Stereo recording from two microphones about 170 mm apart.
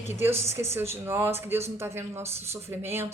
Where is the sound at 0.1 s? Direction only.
15° right (ahead or behind).